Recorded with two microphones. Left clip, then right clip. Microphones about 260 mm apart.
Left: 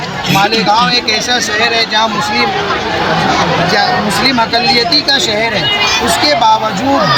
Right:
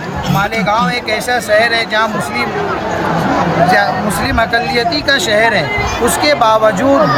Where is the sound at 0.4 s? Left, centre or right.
Right.